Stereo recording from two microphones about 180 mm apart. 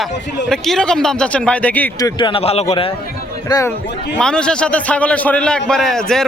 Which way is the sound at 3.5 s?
20° left (ahead or behind).